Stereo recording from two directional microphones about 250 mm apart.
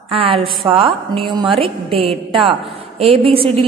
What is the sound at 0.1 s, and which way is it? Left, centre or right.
A woman's voice, right.